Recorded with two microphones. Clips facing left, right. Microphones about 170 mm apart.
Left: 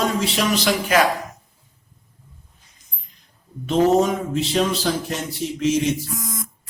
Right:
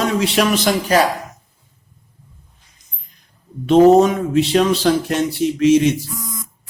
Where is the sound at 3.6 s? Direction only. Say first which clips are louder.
Right 7 dB; 70° right (ahead or behind).